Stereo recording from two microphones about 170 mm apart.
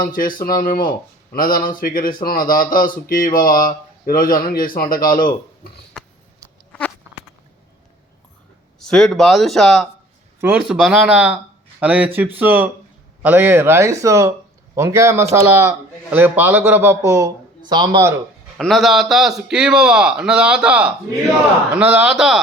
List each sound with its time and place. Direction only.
0.0 s speech: 55° left (ahead or behind)
8.8 s a man's voice: 5° left (ahead or behind); by 18.2 s 20° right (ahead or behind)
18.5 s a man's voice: centre (ahead or behind)